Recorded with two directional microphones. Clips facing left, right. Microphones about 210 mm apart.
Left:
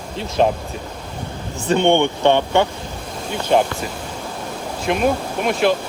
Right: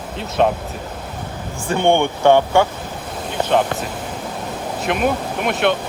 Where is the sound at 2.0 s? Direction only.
20° left (ahead or behind).